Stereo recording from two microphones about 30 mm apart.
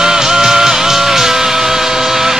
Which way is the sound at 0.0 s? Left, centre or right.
Centre.